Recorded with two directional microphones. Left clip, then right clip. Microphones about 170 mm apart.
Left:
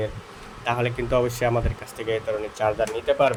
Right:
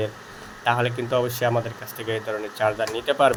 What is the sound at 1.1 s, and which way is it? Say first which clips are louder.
Speech: left 2 dB; 15° left (ahead or behind).